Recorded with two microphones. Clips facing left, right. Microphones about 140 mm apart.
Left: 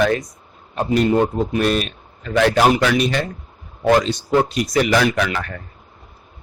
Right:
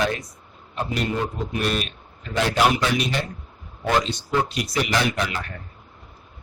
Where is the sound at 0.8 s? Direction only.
45° left (ahead or behind).